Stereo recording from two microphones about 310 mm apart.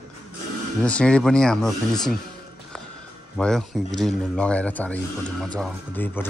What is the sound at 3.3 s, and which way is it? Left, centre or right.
Speech, centre.